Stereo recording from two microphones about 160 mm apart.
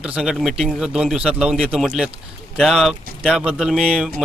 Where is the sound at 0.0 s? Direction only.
5° right (ahead or behind).